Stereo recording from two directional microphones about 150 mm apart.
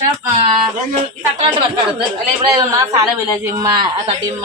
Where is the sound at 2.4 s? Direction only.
20° right (ahead or behind).